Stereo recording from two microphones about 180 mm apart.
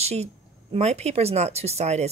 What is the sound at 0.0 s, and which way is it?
Speech, 35° right (ahead or behind).